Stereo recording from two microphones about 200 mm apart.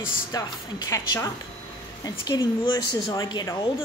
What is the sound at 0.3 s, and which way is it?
A woman's voice, 20° left (ahead or behind).